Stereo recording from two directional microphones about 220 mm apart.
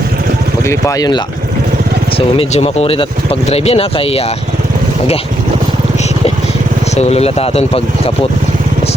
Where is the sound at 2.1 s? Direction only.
25° left (ahead or behind).